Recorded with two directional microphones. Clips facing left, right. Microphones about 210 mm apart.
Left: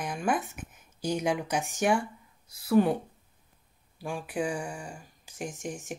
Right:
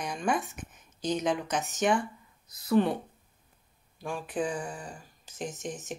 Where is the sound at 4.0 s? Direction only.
10° left (ahead or behind).